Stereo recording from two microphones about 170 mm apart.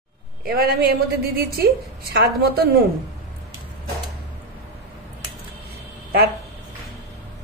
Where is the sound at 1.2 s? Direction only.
65° right (ahead or behind).